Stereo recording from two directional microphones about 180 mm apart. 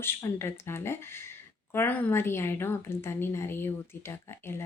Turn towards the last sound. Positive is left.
turn(degrees=15)  # may be behind; listen again after turning